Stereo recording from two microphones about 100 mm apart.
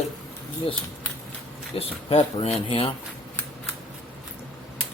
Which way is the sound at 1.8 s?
70° left (ahead or behind).